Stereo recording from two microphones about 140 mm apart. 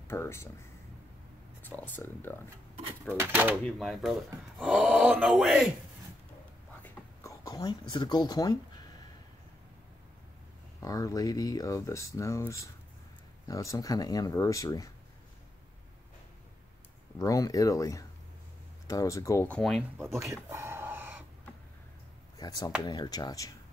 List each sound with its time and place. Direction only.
0.1 s speech: 20° left (ahead or behind)
1.6 s speech: 15° left (ahead or behind)
3.1 s speech: 15° right (ahead or behind)
3.6 s speech: centre (ahead or behind)
6.8 s writing: 25° left (ahead or behind)
10.8 s speech: 25° left (ahead or behind)
17.2 s speech: 25° left (ahead or behind)
19.5 s speech: 5° left (ahead or behind)
20.1 s a sound: 20° right (ahead or behind)
22.4 s speech: 30° left (ahead or behind)